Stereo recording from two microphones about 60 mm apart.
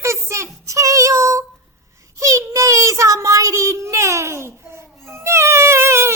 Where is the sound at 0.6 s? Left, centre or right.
Right.